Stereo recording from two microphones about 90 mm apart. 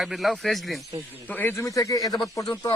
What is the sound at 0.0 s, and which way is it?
Speech, centre (ahead or behind).